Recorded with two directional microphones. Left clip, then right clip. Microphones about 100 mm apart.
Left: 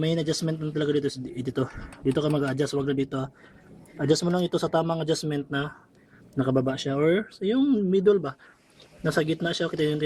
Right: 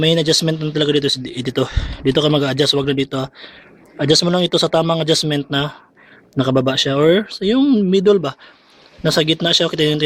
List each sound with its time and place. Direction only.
0.0 s speech: 30° right (ahead or behind)
2.7 s speech: 20° right (ahead or behind)